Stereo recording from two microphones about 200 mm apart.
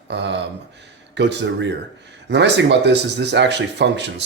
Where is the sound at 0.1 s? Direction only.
60° right (ahead or behind).